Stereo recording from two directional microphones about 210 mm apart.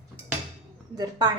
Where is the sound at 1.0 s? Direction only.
20° right (ahead or behind).